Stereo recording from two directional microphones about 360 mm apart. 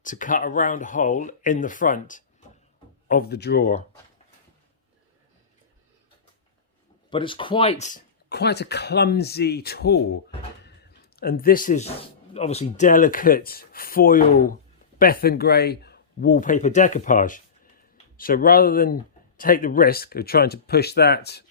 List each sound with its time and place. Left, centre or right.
0.0 s speech: left
7.1 s speech: centre